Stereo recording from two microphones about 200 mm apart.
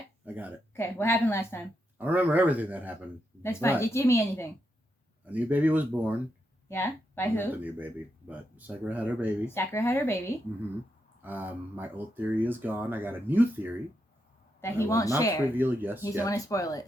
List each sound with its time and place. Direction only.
0.3 s speech: 10° right (ahead or behind)
0.7 s a woman's voice: 10° left (ahead or behind)
2.0 s speech: 10° right (ahead or behind)
3.4 s a woman's voice: 10° left (ahead or behind)
5.2 s speech: 10° right (ahead or behind)
6.7 s speech: 10° left (ahead or behind)
7.5 s speech: 10° right (ahead or behind)
9.6 s a woman's voice: 15° left (ahead or behind)
11.2 s speech: 10° right (ahead or behind)
14.6 s a woman's voice: 15° left (ahead or behind)
15.5 s speech: 10° right (ahead or behind)
16.2 s a woman's voice: 15° left (ahead or behind)